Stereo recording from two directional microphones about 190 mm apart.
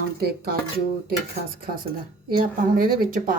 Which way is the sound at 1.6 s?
50° right (ahead or behind).